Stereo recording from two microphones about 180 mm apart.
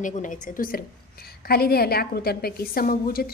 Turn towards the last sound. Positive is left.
turn(degrees=55)  # may be behind; listen again after turning